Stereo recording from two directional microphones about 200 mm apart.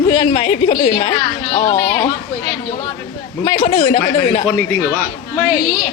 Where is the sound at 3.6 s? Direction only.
30° left (ahead or behind).